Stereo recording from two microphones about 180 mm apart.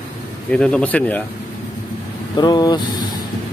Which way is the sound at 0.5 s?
5° left (ahead or behind).